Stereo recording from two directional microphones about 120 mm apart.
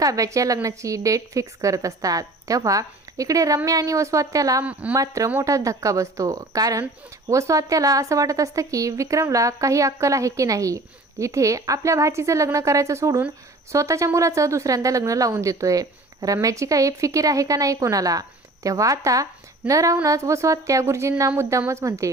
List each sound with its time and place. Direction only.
0.0 s speech: 30° right (ahead or behind)
4.6 s a woman's voice: 10° right (ahead or behind)
4.9 s speech: 30° right (ahead or behind)